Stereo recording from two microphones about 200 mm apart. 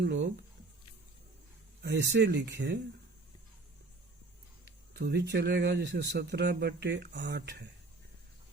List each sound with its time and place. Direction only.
0.0 s speech: 60° right (ahead or behind)
1.8 s speech: 55° right (ahead or behind)
4.9 s speech: 55° right (ahead or behind)